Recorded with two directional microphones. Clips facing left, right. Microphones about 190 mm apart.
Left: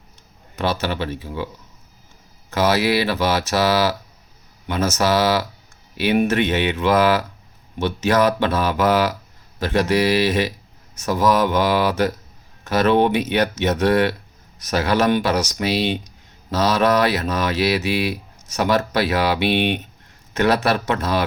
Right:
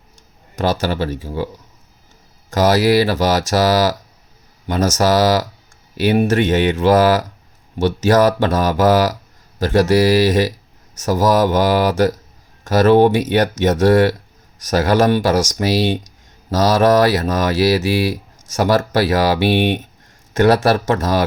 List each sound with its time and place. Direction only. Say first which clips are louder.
0.5 s speech: right 4 dB; 45° right (ahead or behind)
2.5 s speech: right 5 dB; 45° right (ahead or behind)